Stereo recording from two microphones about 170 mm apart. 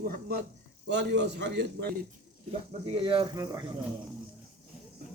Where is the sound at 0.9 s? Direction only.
90° right.